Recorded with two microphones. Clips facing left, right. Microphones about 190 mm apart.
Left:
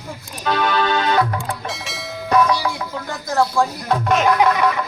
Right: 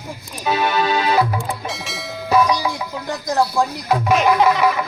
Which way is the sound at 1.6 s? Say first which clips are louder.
Right 1 dB; centre (ahead or behind).